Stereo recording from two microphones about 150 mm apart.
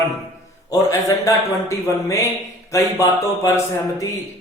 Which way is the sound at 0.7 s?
20° left (ahead or behind).